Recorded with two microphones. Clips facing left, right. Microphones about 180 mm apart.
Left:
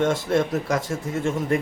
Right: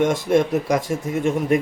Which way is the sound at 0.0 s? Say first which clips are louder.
Right 3 dB; 15° right (ahead or behind).